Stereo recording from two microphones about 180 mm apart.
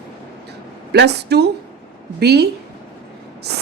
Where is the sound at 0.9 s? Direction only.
70° right (ahead or behind).